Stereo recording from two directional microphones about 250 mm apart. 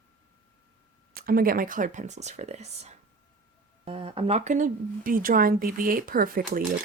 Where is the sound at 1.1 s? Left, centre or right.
Right.